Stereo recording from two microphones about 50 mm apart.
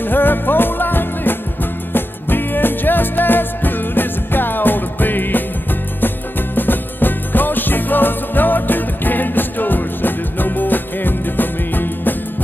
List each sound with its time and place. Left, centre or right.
0.0 s music: left